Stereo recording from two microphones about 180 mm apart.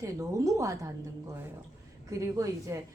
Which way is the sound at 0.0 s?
20° right (ahead or behind).